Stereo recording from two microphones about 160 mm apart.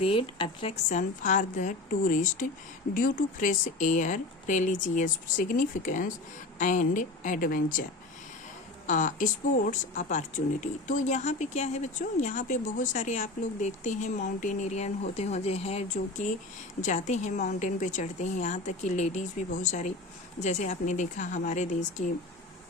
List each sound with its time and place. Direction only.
0.0 s speech: 35° left (ahead or behind)
0.9 s speech: 50° left (ahead or behind)
8.9 s speech: 50° left (ahead or behind)